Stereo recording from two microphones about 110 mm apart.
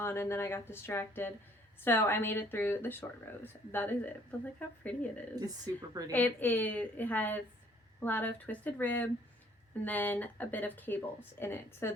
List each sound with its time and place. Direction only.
0.0 s speech: 20° left (ahead or behind)
5.7 s a woman's voice: 35° right (ahead or behind)
6.1 s speech: 15° left (ahead or behind)